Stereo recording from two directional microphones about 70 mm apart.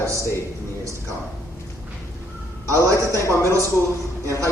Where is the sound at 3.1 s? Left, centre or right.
Left.